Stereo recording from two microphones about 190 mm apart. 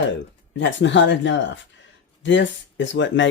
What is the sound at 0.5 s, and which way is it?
Speech, 70° left (ahead or behind).